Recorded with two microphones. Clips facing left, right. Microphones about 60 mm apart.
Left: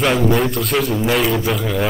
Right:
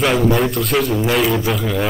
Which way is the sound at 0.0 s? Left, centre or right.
Centre.